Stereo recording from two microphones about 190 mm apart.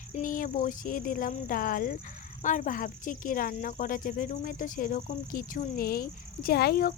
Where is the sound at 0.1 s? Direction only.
45° left (ahead or behind).